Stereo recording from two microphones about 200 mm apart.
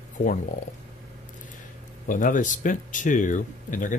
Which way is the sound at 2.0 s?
40° left (ahead or behind).